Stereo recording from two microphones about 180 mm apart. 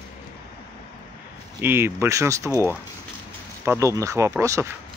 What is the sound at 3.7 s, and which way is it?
Speech, 15° right (ahead or behind).